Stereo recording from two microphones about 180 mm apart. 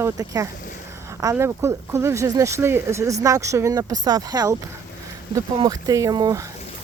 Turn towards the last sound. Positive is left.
turn(degrees=-20)  # may be behind; listen again after turning